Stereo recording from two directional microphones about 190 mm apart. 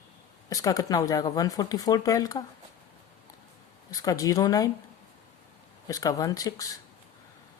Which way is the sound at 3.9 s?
20° left (ahead or behind).